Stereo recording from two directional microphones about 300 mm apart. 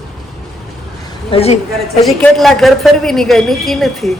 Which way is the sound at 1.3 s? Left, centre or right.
Centre.